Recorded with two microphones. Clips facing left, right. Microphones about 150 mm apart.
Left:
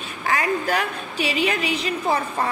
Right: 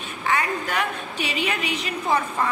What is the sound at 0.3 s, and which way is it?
A woman's voice, 35° left (ahead or behind).